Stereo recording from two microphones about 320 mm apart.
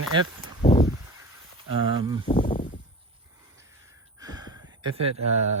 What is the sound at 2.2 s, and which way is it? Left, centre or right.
Snake, centre.